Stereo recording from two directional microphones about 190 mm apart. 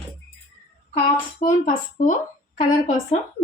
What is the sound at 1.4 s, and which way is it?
A woman's voice, 45° left (ahead or behind).